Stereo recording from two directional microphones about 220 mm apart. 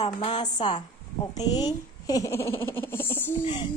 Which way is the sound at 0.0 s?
25° left (ahead or behind).